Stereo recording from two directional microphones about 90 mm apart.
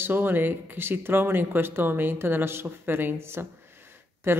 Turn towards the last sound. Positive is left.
turn(degrees=-30)  # may be behind; listen again after turning